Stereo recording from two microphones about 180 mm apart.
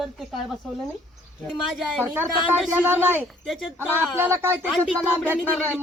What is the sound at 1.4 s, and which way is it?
Speech, centre (ahead or behind).